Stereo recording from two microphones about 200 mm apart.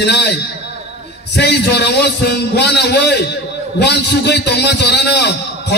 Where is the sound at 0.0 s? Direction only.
55° left (ahead or behind).